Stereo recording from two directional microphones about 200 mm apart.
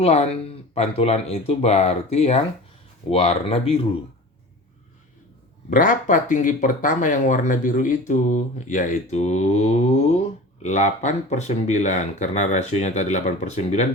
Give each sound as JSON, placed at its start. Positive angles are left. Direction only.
{"t": 0.0, "sound": "speech", "side_deg": 30}
{"t": 5.7, "sound": "speech", "side_deg": 40}